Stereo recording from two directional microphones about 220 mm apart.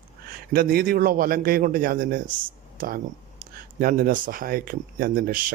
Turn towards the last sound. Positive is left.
turn(degrees=-40)  # may be behind; listen again after turning